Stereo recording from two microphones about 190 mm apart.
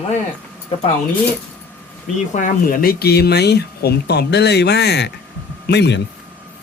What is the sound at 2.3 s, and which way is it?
Speech, 45° left (ahead or behind).